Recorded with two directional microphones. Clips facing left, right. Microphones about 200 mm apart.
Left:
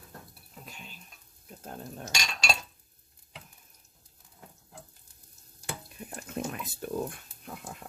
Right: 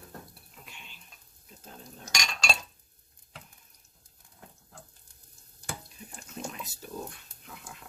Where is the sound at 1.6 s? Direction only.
55° left (ahead or behind).